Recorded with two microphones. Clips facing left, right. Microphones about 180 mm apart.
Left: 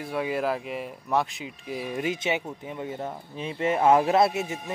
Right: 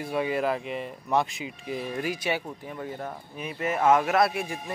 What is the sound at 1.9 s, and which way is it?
Speech, 20° left (ahead or behind).